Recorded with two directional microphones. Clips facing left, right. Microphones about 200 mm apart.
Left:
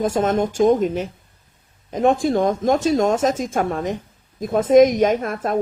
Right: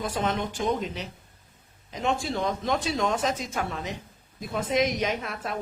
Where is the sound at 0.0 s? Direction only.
45° left (ahead or behind).